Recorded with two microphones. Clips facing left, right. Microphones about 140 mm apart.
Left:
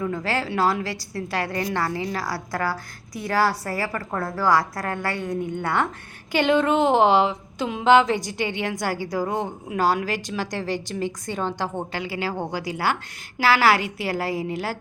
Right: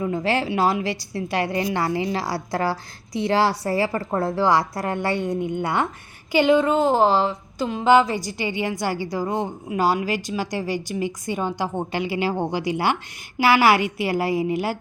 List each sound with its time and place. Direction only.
0.0 s a woman's voice: 20° right (ahead or behind)